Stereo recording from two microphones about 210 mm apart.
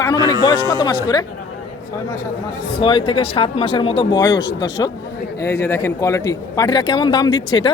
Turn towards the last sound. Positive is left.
turn(degrees=20)  # may be behind; listen again after turning